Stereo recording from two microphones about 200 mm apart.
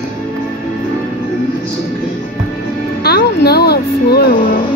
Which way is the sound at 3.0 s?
50° left (ahead or behind).